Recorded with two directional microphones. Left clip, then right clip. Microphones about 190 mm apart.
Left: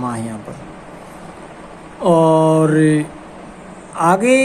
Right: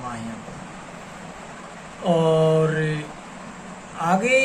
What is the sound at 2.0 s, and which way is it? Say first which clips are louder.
Speech: left 7 dB; 65° left (ahead or behind).